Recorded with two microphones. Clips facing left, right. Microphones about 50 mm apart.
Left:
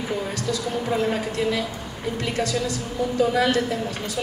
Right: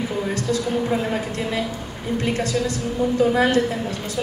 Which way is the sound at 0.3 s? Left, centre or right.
Right.